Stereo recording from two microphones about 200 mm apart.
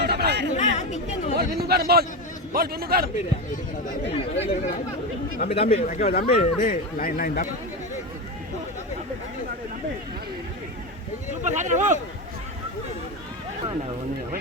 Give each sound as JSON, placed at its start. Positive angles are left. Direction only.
{"t": 0.0, "sound": "a sound", "side_deg": -55}
{"t": 0.5, "sound": "speech", "side_deg": 35}
{"t": 1.4, "sound": "a man's voice", "side_deg": -50}
{"t": 4.1, "sound": "speech", "side_deg": 30}
{"t": 6.1, "sound": "speech", "side_deg": 45}
{"t": 11.4, "sound": "speech", "side_deg": -35}